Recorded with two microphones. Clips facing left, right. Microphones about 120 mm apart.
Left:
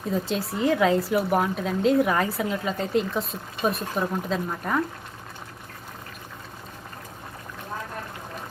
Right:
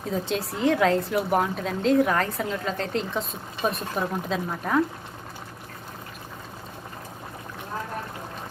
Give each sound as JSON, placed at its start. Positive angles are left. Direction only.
{"t": 0.1, "sound": "speech", "side_deg": 0}